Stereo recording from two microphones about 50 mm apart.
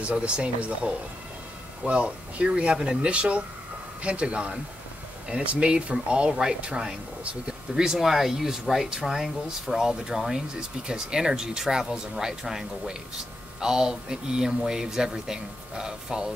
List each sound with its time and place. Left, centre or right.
0.1 s speech: right